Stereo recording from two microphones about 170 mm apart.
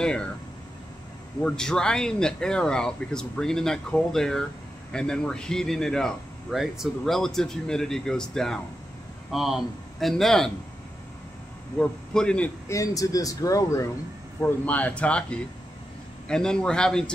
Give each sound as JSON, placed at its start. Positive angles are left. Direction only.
{"t": 0.0, "sound": "speech", "side_deg": 5}
{"t": 1.4, "sound": "a man's voice", "side_deg": 5}
{"t": 11.8, "sound": "a man's voice", "side_deg": 5}
{"t": 12.6, "sound": "a man's voice", "side_deg": 20}